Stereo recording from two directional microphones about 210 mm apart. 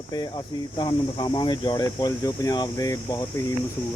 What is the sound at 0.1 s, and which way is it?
Speech, 20° left (ahead or behind).